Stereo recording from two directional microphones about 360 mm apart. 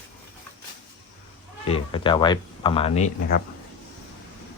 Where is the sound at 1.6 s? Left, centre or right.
Centre.